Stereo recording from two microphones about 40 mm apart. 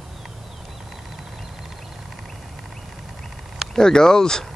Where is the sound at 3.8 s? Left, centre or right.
Centre.